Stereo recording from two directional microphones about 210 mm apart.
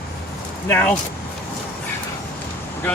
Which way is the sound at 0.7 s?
10° left (ahead or behind).